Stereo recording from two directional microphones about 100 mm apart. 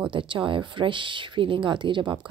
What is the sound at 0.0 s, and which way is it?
Speech, 55° right (ahead or behind).